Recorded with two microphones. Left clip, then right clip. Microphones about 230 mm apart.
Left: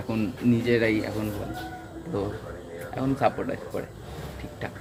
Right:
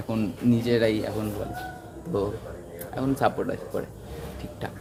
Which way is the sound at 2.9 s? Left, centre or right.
Centre.